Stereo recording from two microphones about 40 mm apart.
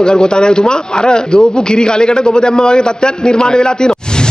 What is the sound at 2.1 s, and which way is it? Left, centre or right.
A man's voice, centre.